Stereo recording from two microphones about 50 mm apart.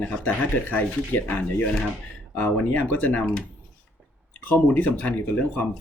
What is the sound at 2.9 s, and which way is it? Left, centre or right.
Speech, left.